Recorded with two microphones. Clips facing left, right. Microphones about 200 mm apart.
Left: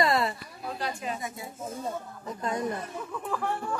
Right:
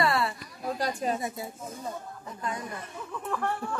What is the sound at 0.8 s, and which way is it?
Speech, 40° right (ahead or behind).